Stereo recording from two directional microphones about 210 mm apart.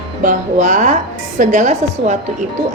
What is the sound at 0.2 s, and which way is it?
A woman's voice, 35° right (ahead or behind).